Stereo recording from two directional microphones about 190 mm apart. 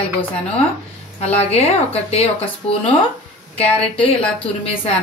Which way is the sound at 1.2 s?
35° left (ahead or behind).